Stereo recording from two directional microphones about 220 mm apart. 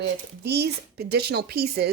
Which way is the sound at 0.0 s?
50° right (ahead or behind).